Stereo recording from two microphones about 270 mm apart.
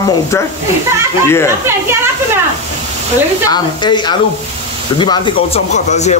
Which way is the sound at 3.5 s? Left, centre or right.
Centre.